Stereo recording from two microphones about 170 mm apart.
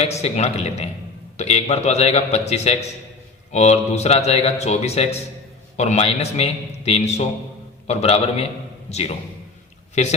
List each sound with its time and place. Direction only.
0.0 s a man's voice: 40° left (ahead or behind)